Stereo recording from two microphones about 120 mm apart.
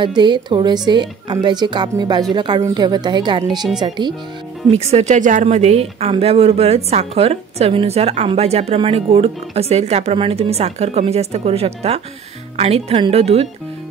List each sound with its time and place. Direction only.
0.0 s speech: 40° right (ahead or behind)
4.9 s a woman's voice: 80° right; by 13.5 s 55° right (ahead or behind)